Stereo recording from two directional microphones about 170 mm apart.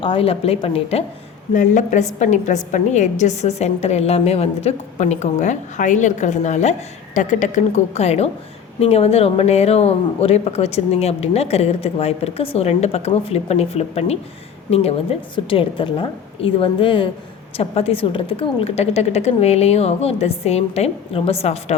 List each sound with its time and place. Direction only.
0.0 s speech: 30° left (ahead or behind)
1.5 s a woman's voice: 45° left (ahead or behind)